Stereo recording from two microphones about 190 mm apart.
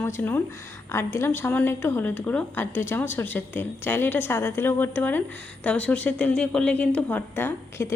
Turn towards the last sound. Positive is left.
turn(degrees=10)  # may be behind; listen again after turning